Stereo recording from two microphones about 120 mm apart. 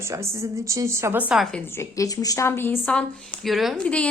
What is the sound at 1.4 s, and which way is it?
Speech, 5° left (ahead or behind).